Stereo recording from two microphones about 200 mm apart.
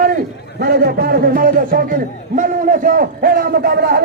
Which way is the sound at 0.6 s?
50° right (ahead or behind).